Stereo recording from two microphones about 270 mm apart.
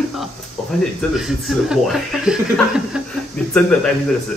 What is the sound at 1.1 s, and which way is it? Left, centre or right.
Speech, centre.